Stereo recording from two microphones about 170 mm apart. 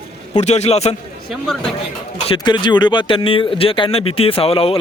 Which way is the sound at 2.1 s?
35° left (ahead or behind).